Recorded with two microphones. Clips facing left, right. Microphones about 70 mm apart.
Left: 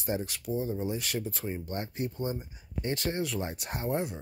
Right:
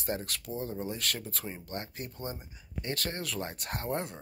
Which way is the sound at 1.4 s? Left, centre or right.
Left.